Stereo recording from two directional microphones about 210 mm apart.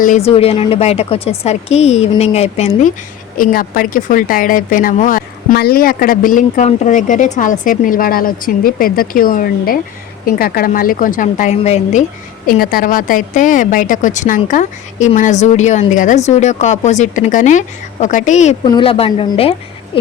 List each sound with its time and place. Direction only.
0.0 s a woman's voice: 35° left (ahead or behind)
3.3 s a woman's voice: 40° left (ahead or behind)
18.6 s speech: 25° left (ahead or behind)